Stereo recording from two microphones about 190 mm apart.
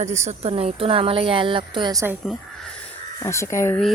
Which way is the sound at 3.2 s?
15° left (ahead or behind).